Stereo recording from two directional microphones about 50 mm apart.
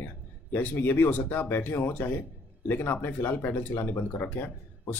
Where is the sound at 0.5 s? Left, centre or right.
Left.